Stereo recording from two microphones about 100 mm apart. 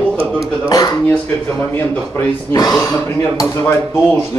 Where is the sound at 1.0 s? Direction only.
15° left (ahead or behind).